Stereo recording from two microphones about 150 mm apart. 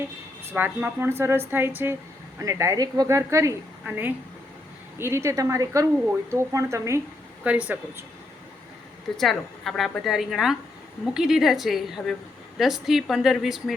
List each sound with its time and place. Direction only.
0.5 s a woman's voice: 10° right (ahead or behind)
7.4 s a woman's voice: 10° right (ahead or behind)
9.1 s a woman's voice: centre (ahead or behind)